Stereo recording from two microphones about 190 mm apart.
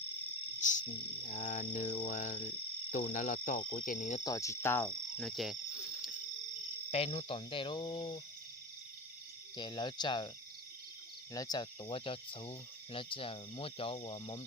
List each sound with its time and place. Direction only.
0.6 s a sound: 40° left (ahead or behind)
1.3 s cricket: 35° left (ahead or behind)
4.2 s cricket: 20° left (ahead or behind)
5.1 s cricket: centre (ahead or behind)
6.9 s speech: 30° left (ahead or behind)
9.6 s speech: 25° left (ahead or behind)
11.3 s speech: 20° left (ahead or behind)